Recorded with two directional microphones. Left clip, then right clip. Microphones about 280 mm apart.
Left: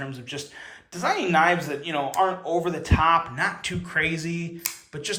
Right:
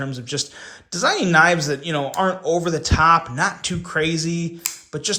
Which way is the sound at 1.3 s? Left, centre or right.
Right.